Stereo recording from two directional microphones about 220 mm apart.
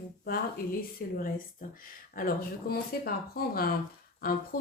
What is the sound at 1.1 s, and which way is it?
Speech, 40° left (ahead or behind).